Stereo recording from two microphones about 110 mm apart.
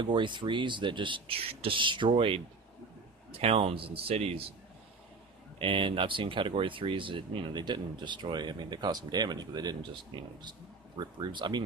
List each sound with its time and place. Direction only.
0.0 s speech: 45° right (ahead or behind); by 4.4 s 65° right (ahead or behind)
5.5 s speech: 55° right (ahead or behind)